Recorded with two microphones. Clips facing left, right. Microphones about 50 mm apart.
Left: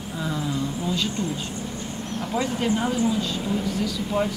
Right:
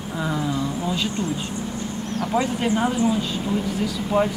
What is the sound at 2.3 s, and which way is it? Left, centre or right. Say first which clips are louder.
Speech: right 2 dB; right.